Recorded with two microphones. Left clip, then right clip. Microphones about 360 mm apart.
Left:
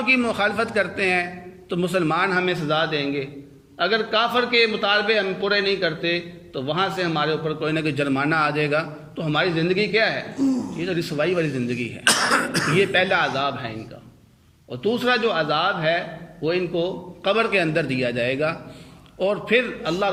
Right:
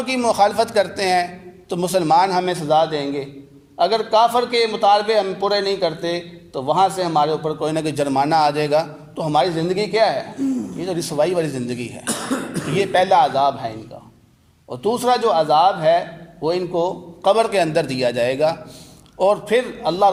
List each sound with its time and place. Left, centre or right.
0.0 s a man's voice: centre
10.4 s speech: centre
10.8 s a man's voice: centre
12.0 s cough: left
12.7 s a man's voice: centre